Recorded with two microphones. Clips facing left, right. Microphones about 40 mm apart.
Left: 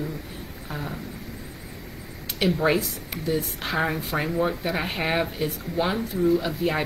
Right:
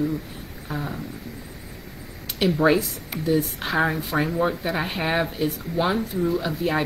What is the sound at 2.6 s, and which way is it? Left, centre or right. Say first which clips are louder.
Speech: right 3 dB; centre.